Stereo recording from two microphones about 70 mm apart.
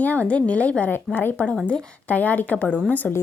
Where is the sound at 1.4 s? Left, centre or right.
Centre.